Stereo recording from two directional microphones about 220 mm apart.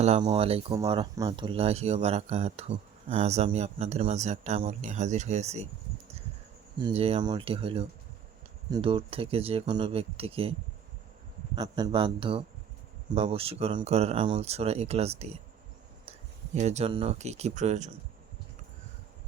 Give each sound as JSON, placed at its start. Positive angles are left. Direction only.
{"t": 0.0, "sound": "speech", "side_deg": -25}
{"t": 6.7, "sound": "speech", "side_deg": -25}
{"t": 11.5, "sound": "speech", "side_deg": -20}
{"t": 16.6, "sound": "speech", "side_deg": -30}